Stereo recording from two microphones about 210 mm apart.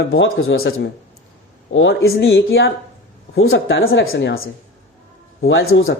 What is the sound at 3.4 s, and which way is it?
Speech, 70° left (ahead or behind).